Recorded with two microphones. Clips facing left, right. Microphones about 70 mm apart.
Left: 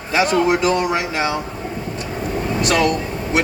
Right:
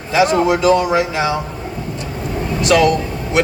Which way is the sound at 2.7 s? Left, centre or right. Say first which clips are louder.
Right 5 dB; left.